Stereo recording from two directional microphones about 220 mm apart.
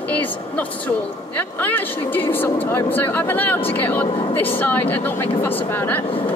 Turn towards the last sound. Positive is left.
turn(degrees=10)  # may be behind; listen again after turning